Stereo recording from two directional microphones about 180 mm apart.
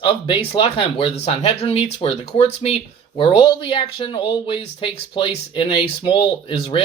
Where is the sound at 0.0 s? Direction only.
30° left (ahead or behind).